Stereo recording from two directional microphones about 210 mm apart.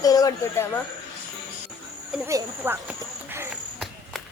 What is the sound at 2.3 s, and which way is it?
Speech, 15° right (ahead or behind).